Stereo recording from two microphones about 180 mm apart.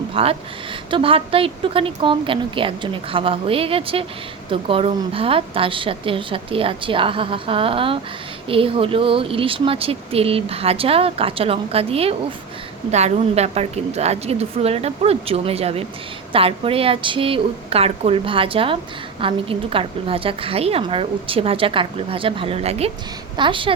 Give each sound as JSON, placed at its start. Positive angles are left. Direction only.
{"t": 0.1, "sound": "a woman's voice", "side_deg": -30}